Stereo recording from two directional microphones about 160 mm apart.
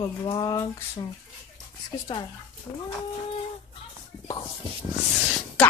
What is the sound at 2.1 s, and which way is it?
Speech, 30° left (ahead or behind).